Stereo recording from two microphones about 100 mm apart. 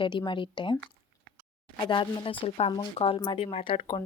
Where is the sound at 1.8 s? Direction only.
55° left (ahead or behind).